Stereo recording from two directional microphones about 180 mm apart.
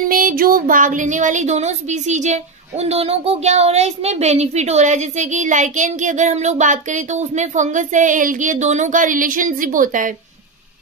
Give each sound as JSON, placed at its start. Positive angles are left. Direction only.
{"t": 0.1, "sound": "speech", "side_deg": -50}